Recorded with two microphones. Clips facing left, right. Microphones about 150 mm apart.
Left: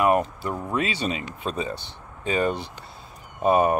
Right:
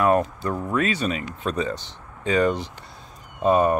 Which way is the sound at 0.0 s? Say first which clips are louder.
Right 1 dB; 15° left (ahead or behind).